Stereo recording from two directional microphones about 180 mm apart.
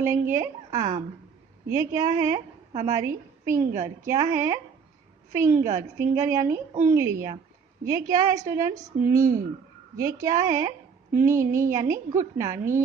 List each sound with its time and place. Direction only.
0.0 s a woman's voice: 15° right (ahead or behind)